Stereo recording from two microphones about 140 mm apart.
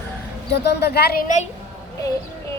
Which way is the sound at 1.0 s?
65° left (ahead or behind).